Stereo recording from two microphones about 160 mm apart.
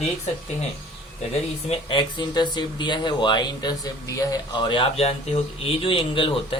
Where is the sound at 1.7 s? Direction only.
30° left (ahead or behind).